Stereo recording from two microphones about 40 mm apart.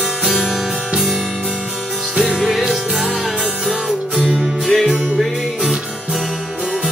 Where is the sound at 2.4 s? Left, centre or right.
Centre.